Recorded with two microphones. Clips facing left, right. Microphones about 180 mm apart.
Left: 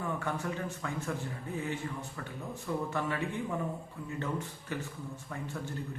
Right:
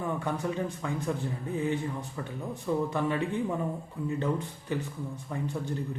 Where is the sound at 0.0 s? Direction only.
15° right (ahead or behind).